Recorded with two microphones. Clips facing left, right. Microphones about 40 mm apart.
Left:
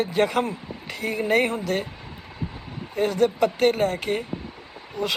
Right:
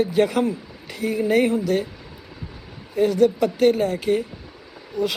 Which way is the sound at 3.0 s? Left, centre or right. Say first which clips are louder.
Right 3 dB; left.